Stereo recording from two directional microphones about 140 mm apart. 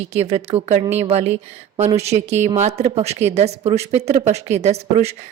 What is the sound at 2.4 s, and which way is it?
A woman's voice, 55° right (ahead or behind).